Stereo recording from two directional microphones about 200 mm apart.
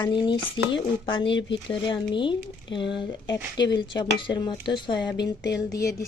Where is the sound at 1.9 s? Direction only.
25° left (ahead or behind).